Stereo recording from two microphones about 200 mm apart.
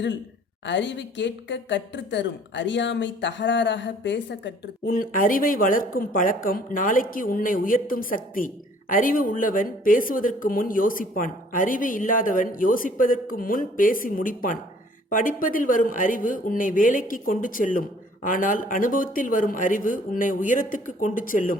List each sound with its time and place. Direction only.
0.6 s a woman's voice: 65° left (ahead or behind); by 21.6 s 40° left (ahead or behind)